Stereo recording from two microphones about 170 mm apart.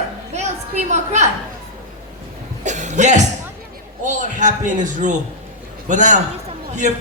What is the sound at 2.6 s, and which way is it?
Cough, 45° right (ahead or behind).